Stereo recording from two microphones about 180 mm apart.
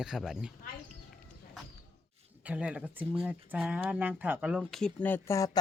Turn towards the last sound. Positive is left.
turn(degrees=20)  # may be behind; listen again after turning